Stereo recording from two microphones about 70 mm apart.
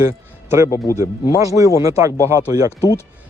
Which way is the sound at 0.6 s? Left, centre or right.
Left.